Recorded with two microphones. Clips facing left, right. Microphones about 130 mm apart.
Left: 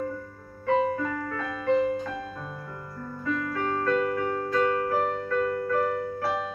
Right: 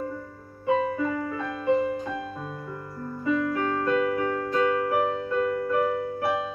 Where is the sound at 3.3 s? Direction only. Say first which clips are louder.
Right 4 dB; 15° right (ahead or behind).